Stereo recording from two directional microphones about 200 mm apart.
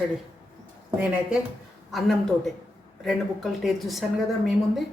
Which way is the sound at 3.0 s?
Centre (ahead or behind).